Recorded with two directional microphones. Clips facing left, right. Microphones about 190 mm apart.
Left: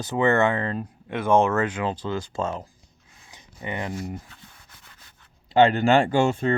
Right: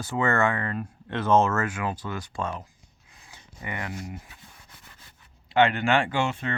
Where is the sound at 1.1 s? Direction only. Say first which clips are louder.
Left 2 dB; 10° left (ahead or behind).